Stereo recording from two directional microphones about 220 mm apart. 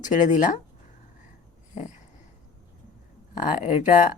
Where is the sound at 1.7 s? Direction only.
35° left (ahead or behind).